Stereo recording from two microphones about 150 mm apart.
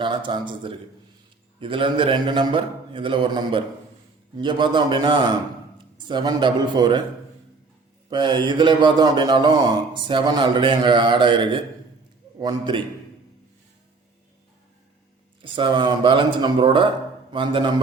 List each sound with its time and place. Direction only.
0.0 s speech: 35° right (ahead or behind)
8.1 s speech: 30° right (ahead or behind)
15.4 s speech: 35° right (ahead or behind)